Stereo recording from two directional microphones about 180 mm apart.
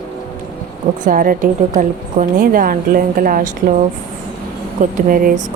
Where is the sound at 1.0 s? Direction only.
50° right (ahead or behind).